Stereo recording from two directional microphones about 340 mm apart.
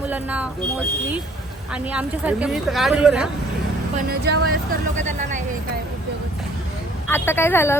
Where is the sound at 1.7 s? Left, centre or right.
Centre.